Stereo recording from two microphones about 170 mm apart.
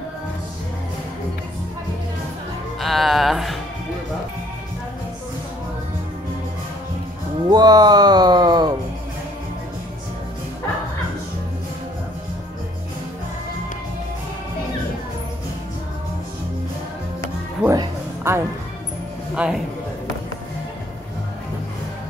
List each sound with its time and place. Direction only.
2.8 s speech: centre (ahead or behind)
7.4 s music: 25° right (ahead or behind)
17.6 s music: 15° right (ahead or behind)